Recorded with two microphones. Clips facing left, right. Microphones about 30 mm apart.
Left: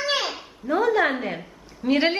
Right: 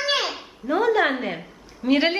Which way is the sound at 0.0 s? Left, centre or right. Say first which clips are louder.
Right 1 dB; right.